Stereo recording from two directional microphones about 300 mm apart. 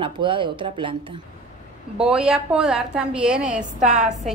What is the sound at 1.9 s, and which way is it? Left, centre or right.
A woman's voice, centre.